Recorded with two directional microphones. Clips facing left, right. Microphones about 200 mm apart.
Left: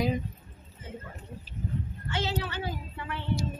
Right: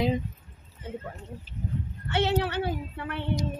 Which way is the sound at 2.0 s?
60° right (ahead or behind).